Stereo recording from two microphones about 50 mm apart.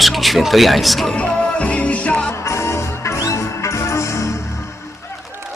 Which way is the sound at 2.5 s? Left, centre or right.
Left.